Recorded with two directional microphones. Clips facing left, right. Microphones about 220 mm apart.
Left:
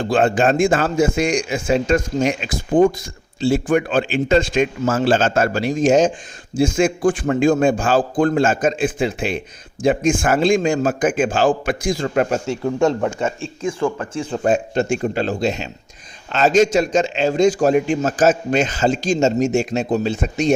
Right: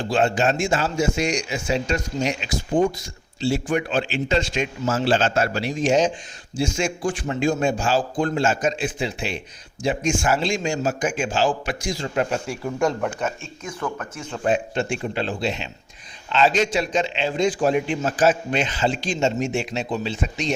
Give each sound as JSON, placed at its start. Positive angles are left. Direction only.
{"t": 0.1, "sound": "a man's voice", "side_deg": 55}
{"t": 12.5, "sound": "a man's voice", "side_deg": 25}